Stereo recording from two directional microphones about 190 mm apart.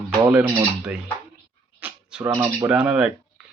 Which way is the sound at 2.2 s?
15° right (ahead or behind).